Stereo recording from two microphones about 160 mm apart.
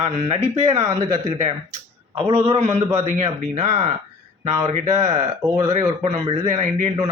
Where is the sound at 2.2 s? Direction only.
35° right (ahead or behind).